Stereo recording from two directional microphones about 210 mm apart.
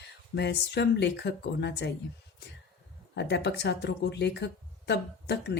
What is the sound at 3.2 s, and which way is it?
A woman's voice, 55° left (ahead or behind).